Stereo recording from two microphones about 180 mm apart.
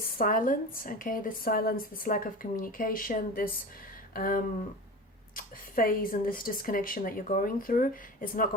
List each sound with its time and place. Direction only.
0.2 s a woman's voice: 50° left (ahead or behind)